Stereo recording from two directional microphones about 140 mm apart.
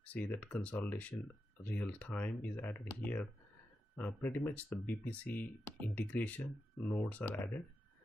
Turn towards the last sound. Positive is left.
turn(degrees=15)  # may be behind; listen again after turning